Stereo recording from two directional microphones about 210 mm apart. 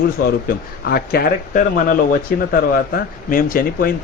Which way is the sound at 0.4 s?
45° left (ahead or behind).